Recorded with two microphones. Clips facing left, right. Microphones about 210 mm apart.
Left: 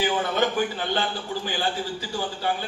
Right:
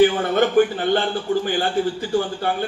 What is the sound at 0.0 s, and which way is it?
A man's voice, 50° right (ahead or behind).